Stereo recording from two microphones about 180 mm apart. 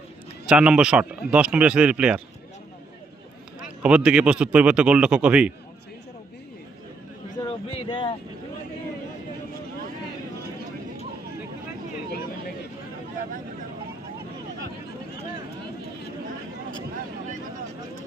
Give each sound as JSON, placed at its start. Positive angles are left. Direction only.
{"t": 0.4, "sound": "speech", "side_deg": -5}
{"t": 3.6, "sound": "speech", "side_deg": -5}
{"t": 7.9, "sound": "vehicle", "side_deg": 30}